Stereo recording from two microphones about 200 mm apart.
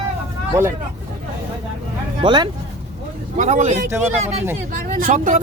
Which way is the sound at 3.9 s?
10° right (ahead or behind).